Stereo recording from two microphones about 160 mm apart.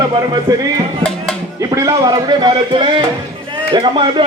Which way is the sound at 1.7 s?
25° right (ahead or behind).